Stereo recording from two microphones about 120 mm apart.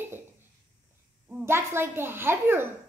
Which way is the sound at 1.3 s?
20° right (ahead or behind).